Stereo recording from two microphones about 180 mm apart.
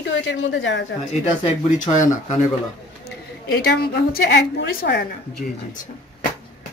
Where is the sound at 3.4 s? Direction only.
60° left (ahead or behind).